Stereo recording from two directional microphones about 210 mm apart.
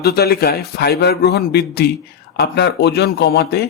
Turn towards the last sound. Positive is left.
turn(degrees=50)  # may be behind; listen again after turning